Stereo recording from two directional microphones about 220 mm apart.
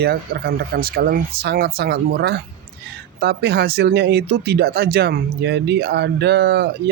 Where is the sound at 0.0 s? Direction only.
45° right (ahead or behind).